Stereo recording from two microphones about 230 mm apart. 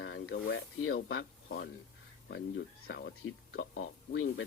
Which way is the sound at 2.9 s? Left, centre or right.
Left.